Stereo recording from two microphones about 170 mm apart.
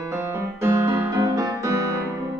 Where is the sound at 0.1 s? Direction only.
15° right (ahead or behind).